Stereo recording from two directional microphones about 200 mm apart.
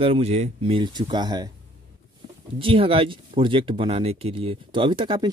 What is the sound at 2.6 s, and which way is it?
Speech, 25° right (ahead or behind).